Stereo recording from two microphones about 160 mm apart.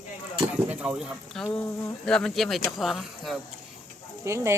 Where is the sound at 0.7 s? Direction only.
10° right (ahead or behind).